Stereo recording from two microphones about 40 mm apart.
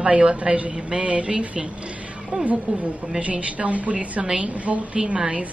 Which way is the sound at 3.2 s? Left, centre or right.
Right.